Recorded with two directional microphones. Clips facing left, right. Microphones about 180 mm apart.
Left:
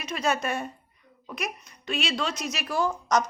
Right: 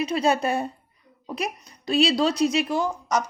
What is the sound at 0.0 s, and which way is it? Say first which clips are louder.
Speech: right 6 dB; 30° right (ahead or behind).